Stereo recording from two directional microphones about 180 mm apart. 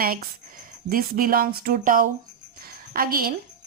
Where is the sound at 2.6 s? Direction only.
55° right (ahead or behind).